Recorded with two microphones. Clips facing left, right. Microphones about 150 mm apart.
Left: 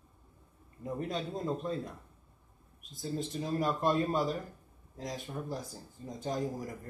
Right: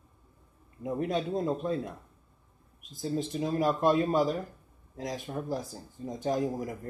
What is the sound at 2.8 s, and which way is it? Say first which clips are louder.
Speech: right 5 dB; centre (ahead or behind).